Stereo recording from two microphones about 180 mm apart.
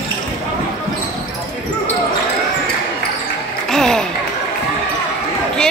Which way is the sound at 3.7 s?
5° left (ahead or behind).